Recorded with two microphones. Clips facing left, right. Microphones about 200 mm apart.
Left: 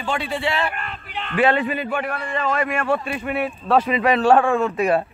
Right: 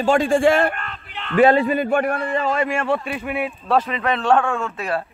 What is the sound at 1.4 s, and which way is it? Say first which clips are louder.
Speech: right 5 dB; 40° right (ahead or behind).